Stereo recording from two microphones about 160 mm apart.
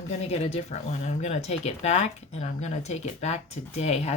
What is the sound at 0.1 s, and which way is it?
Speech, 40° left (ahead or behind).